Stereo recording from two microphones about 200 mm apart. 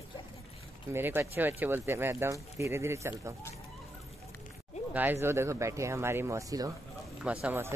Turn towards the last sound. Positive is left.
turn(degrees=-10)  # may be behind; listen again after turning